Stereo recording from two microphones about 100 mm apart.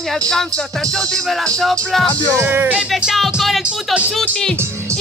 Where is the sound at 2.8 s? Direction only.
5° right (ahead or behind).